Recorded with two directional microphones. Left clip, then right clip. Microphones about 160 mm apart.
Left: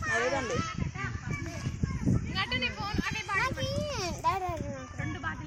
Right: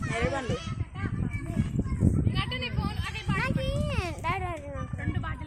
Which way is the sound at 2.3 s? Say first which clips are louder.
Left 2 dB; 90° right.